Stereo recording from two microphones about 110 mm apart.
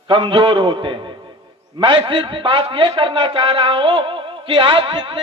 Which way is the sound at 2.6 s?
60° right (ahead or behind).